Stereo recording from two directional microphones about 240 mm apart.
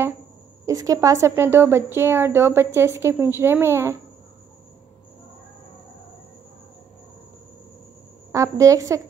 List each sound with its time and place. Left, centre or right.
0.7 s a woman's voice: centre
8.3 s a woman's voice: centre